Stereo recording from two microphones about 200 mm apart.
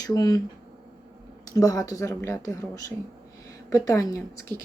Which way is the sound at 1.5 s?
15° left (ahead or behind).